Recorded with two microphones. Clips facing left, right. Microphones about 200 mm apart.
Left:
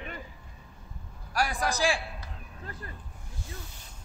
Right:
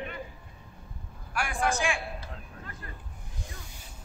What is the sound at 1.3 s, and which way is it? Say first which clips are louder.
Speech: even; 40° left (ahead or behind).